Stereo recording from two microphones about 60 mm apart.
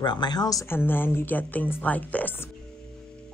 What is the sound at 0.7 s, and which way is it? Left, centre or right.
Speech, left.